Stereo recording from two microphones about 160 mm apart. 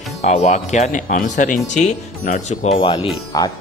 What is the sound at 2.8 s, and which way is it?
Speech, 35° left (ahead or behind).